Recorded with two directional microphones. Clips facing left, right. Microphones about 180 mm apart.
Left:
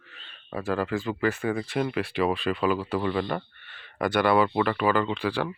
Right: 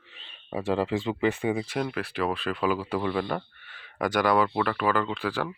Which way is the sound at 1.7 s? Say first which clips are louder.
Left 3 dB; centre (ahead or behind).